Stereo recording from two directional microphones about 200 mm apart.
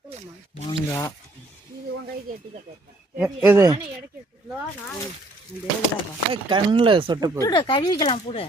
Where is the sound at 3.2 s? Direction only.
5° right (ahead or behind).